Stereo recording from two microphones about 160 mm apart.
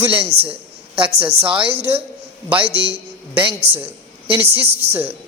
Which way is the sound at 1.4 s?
10° right (ahead or behind).